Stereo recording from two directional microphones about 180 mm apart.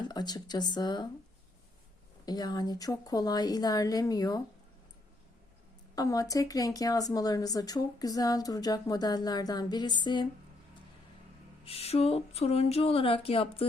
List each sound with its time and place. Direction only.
0.1 s speech: 20° left (ahead or behind)
2.2 s speech: 20° left (ahead or behind)
6.0 s speech: 20° left (ahead or behind)
11.6 s a sound: 35° left (ahead or behind)